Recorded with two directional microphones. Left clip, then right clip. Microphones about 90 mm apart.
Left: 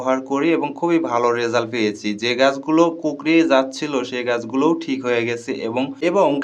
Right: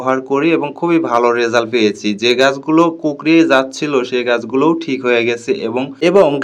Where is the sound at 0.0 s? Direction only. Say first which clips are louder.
Right 5 dB; 30° right (ahead or behind).